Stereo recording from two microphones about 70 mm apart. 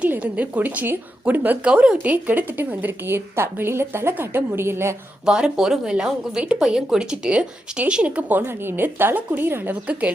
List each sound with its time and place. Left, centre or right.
0.0 s a woman's voice: centre
2.1 s a woman's voice: right
5.2 s speech: centre
8.4 s a woman's voice: right
9.8 s a woman's voice: centre